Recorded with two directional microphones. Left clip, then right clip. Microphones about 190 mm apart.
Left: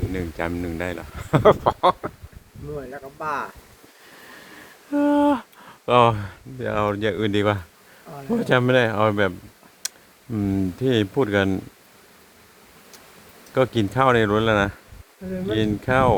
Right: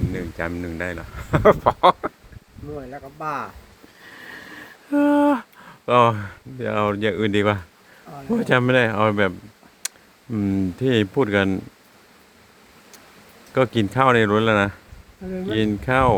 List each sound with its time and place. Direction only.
0.1 s speech: 20° left (ahead or behind)
1.6 s speech: 10° right (ahead or behind)
2.7 s speech: 10° left (ahead or behind)
4.9 s a sound: 5° right (ahead or behind)
5.8 s speech: 15° left (ahead or behind)
6.6 s speech: 5° right (ahead or behind)
10.3 s speech: centre (ahead or behind)
13.5 s speech: centre (ahead or behind)